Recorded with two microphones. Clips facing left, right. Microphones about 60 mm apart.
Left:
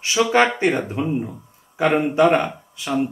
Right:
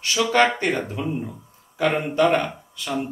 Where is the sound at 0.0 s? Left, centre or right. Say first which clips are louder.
Left 2 dB; centre.